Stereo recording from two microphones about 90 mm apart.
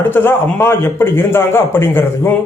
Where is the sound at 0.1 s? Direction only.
25° left (ahead or behind).